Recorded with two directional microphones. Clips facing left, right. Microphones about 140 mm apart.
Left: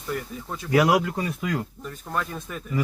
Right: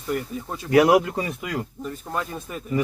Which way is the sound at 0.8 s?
20° right (ahead or behind).